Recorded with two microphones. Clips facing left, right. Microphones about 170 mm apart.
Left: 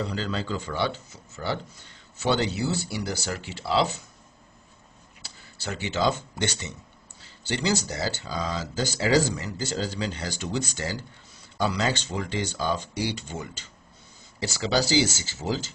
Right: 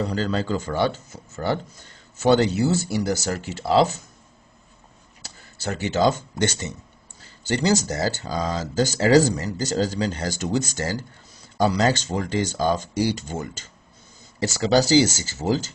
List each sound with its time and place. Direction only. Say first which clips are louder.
0.0 s speech: right 5 dB; 45° right (ahead or behind)
5.2 s speech: right 6 dB; 45° right (ahead or behind)